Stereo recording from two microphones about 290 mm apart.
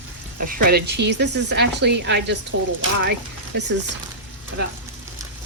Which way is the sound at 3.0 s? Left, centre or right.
Right.